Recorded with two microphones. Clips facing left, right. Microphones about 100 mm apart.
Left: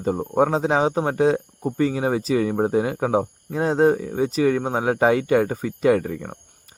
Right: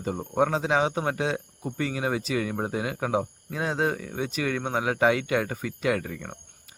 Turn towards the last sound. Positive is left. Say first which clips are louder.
# left 8 dB
turn(degrees=35)  # may be behind; listen again after turning